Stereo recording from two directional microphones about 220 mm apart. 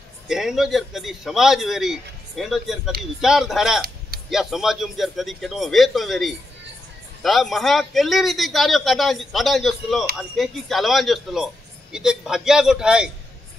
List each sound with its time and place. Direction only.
0.3 s speech: centre (ahead or behind)